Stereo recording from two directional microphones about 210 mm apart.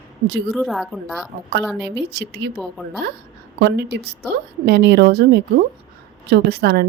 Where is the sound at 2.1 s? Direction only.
55° right (ahead or behind).